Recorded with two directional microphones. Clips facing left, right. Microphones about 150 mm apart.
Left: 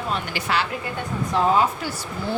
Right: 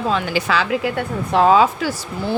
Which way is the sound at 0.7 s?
80° right.